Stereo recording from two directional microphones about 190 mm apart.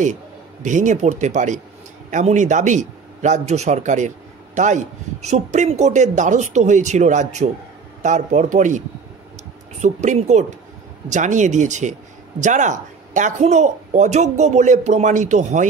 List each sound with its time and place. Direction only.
0.0 s a man's voice: 40° right (ahead or behind)